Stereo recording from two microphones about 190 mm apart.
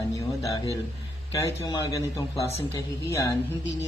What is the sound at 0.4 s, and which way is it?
Speech, 20° left (ahead or behind).